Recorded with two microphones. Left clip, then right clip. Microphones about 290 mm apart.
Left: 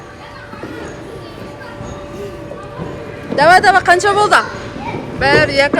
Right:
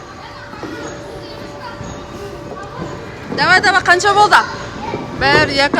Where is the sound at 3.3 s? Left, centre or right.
Centre.